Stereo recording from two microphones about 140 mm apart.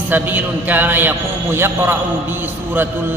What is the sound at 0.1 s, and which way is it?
A man's voice, 10° right (ahead or behind).